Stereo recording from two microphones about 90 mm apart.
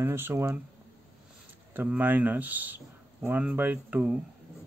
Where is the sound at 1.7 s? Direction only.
20° right (ahead or behind).